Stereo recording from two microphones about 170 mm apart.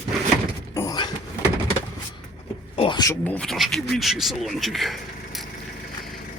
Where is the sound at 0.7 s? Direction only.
20° left (ahead or behind).